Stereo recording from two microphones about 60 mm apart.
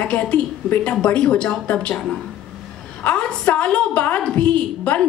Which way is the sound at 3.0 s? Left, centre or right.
Centre.